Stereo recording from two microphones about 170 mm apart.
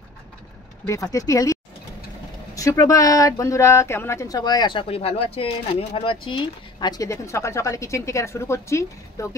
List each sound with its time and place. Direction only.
0.8 s speech: 20° left (ahead or behind)